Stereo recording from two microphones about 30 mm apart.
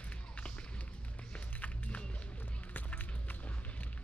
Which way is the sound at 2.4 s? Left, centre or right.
Left.